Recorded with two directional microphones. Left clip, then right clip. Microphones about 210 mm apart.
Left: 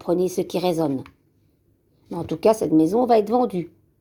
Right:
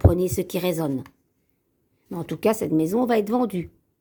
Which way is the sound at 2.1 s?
40° right (ahead or behind).